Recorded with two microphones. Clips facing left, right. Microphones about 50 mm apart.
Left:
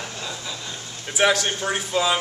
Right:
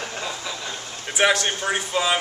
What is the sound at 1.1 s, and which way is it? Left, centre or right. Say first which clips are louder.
A man's voice: even; centre.